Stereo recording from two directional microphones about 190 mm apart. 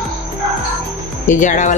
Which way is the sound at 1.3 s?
40° left (ahead or behind).